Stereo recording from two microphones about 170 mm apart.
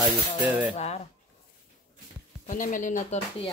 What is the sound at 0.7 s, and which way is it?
Speech, 40° left (ahead or behind).